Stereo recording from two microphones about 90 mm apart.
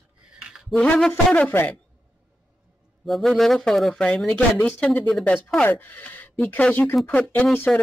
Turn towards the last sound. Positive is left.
turn(degrees=10)  # may be behind; listen again after turning